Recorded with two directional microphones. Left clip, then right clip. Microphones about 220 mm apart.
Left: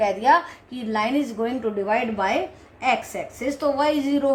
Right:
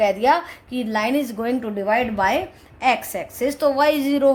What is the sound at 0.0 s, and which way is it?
A woman's voice, 40° right (ahead or behind).